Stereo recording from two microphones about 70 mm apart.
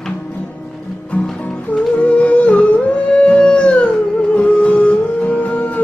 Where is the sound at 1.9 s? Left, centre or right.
Centre.